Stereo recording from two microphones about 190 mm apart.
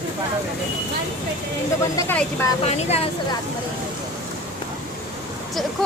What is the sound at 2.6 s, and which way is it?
Speech, 35° left (ahead or behind).